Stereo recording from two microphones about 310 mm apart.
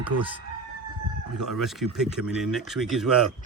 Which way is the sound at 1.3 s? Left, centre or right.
Centre.